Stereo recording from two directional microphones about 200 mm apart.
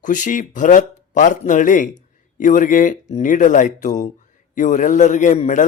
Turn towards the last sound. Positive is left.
turn(degrees=40)  # may be behind; listen again after turning